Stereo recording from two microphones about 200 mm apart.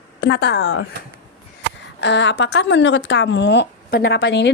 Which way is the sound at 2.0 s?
60° left (ahead or behind).